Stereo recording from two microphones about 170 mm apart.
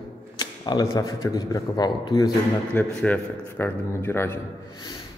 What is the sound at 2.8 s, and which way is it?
A man's voice, 10° left (ahead or behind).